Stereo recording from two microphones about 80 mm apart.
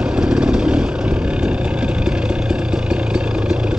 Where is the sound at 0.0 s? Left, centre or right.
Centre.